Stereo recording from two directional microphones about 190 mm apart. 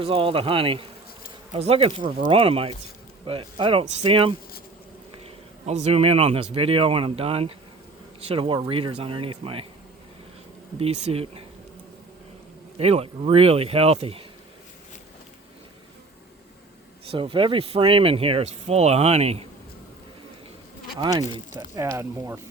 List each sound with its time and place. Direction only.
0.0 s a man's voice: 30° right (ahead or behind)
10.8 s speech: 35° right (ahead or behind)
12.7 s speech: 30° right (ahead or behind)
17.1 s speech: 25° right (ahead or behind)
21.0 s speech: 20° right (ahead or behind)